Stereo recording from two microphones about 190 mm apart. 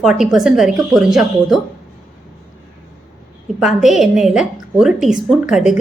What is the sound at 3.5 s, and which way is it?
A woman's voice, centre (ahead or behind).